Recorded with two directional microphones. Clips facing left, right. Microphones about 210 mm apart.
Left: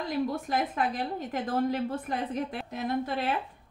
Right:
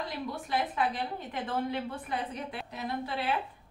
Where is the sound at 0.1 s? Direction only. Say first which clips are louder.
Left 5 dB; 45° left (ahead or behind).